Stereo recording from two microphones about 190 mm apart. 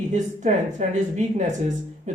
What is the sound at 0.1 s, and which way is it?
Speech, 40° right (ahead or behind).